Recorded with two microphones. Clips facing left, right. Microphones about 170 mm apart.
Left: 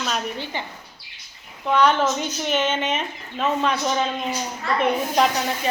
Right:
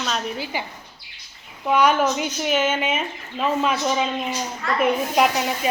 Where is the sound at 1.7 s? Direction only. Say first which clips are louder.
Even; 10° right (ahead or behind).